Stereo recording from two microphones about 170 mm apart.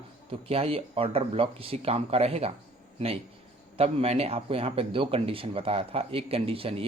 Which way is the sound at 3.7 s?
35° right (ahead or behind).